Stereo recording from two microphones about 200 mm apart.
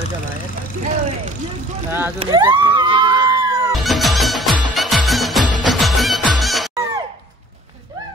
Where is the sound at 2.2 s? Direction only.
20° right (ahead or behind).